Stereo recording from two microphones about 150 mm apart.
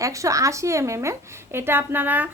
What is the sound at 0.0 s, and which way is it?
A woman's voice, 20° right (ahead or behind).